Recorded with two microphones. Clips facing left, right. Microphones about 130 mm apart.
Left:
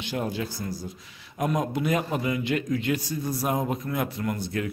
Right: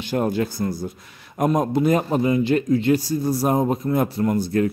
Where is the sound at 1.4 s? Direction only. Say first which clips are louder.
Right 7 dB; 40° right (ahead or behind).